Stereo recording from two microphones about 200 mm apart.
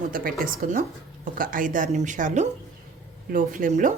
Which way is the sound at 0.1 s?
45° right (ahead or behind).